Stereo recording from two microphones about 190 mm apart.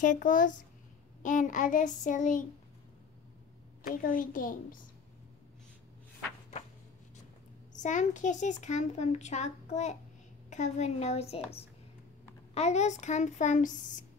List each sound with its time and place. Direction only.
0.0 s child singing: 45° left (ahead or behind)
3.8 s child singing: 50° left (ahead or behind)
7.7 s a child's voice: 40° left (ahead or behind)